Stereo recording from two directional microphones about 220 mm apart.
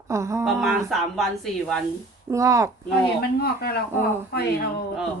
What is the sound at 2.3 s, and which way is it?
Speech, 15° right (ahead or behind).